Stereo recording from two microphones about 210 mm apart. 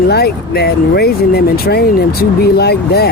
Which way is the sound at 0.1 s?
50° left (ahead or behind).